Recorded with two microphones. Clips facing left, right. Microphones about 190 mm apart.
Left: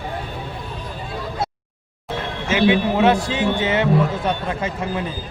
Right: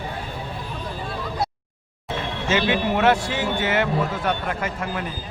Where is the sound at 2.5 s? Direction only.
15° left (ahead or behind).